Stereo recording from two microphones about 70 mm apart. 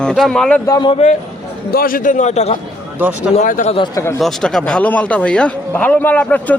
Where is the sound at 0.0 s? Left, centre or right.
Centre.